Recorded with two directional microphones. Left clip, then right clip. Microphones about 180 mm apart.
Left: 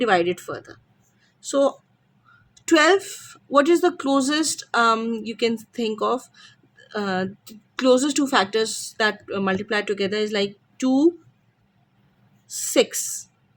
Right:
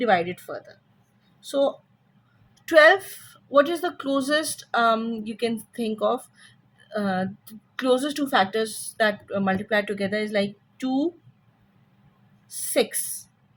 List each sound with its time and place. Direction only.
0.0 s speech: 50° left (ahead or behind)
12.5 s speech: 45° left (ahead or behind)